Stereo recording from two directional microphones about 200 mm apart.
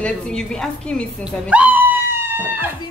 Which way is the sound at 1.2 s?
5° right (ahead or behind).